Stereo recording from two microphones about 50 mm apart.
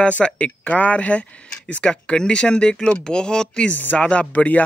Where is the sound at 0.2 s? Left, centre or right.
Left.